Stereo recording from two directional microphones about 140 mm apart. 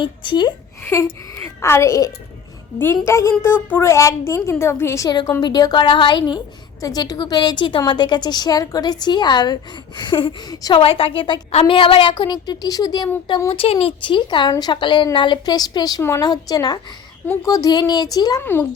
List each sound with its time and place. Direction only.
0.0 s a woman's voice: 35° left (ahead or behind)
1.4 s a woman's voice: 20° left (ahead or behind)
13.5 s a woman's voice: 45° left (ahead or behind); by 18.4 s 30° left (ahead or behind)